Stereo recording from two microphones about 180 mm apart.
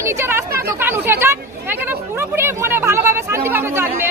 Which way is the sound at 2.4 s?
15° right (ahead or behind).